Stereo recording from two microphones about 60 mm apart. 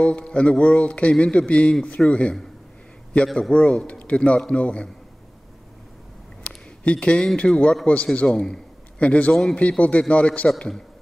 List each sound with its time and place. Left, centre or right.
0.0 s a man's voice: left
6.4 s a sound: centre
7.3 s a man's voice: centre
9.3 s a man's voice: centre
9.6 s a man's voice: left